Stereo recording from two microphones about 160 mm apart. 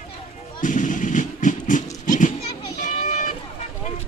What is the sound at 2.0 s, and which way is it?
Children playing, 55° left (ahead or behind).